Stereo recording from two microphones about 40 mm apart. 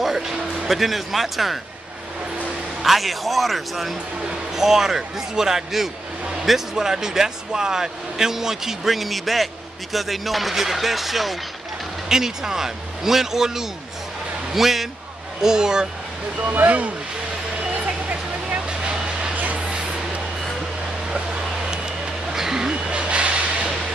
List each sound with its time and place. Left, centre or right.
0.0 s music: centre
0.7 s speech: centre
2.8 s speech: centre
15.4 s speech: centre
16.6 s speech: right
18.7 s vehicle: right
19.3 s vehicle: right
22.3 s vehicle: centre
22.8 s vehicle: right